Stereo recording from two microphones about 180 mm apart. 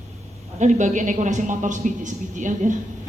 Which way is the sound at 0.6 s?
40° right (ahead or behind).